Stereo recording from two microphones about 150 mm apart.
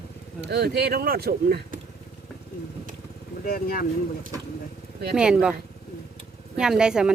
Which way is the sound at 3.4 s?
80° left.